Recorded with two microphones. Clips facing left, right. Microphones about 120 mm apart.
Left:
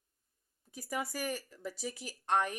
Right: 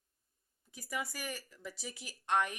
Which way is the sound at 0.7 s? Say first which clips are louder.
Left 3 dB; 40° left (ahead or behind).